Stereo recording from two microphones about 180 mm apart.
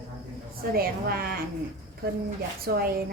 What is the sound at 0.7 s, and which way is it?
Speech, 55° right (ahead or behind).